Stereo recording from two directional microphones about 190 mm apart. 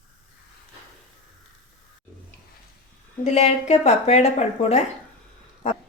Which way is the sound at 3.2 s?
35° left (ahead or behind).